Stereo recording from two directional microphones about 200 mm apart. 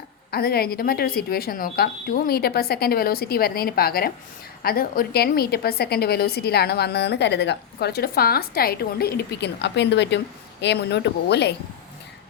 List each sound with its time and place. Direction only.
0.3 s a woman's voice: 50° left (ahead or behind)